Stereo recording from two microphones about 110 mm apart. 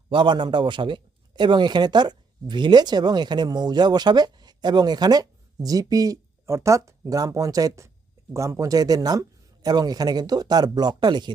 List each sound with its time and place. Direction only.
0.1 s a man's voice: 45° right (ahead or behind)